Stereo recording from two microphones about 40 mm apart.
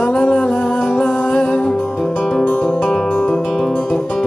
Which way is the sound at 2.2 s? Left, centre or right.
Centre.